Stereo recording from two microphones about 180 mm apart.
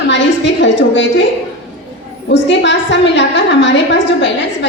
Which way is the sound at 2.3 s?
80° left.